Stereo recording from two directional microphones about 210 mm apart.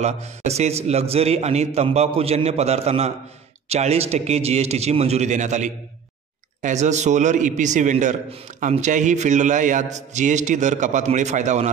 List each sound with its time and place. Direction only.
0.0 s a man's voice: 30° right (ahead or behind)